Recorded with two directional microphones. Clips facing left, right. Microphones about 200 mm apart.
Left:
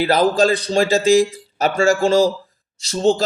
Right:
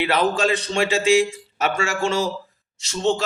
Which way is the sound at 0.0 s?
35° left (ahead or behind).